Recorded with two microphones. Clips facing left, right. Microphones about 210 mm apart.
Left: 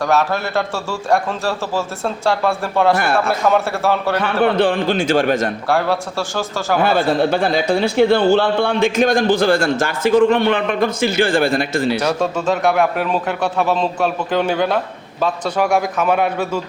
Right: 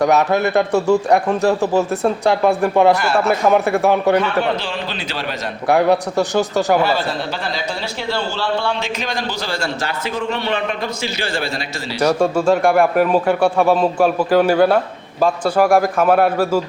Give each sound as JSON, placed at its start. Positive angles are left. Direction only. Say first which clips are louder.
{"t": 0.0, "sound": "a man's voice", "louder": "right 3 dB", "side_deg": -20}
{"t": 3.0, "sound": "a man's voice", "louder": "right 1 dB", "side_deg": 55}
{"t": 3.4, "sound": "a man's voice", "louder": "right 3 dB", "side_deg": -15}
{"t": 4.5, "sound": "a man's voice", "louder": "left 9 dB", "side_deg": 55}
{"t": 5.6, "sound": "a man's voice", "louder": "right 4 dB", "side_deg": -20}
{"t": 6.8, "sound": "a man's voice", "louder": "left 5 dB", "side_deg": 55}
{"t": 12.2, "sound": "a man's voice", "louder": "right 3 dB", "side_deg": -10}